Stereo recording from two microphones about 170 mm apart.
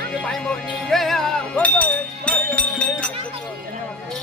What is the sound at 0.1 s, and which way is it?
Music, 5° left (ahead or behind).